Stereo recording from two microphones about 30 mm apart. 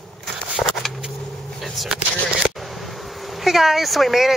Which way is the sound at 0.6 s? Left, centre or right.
Left.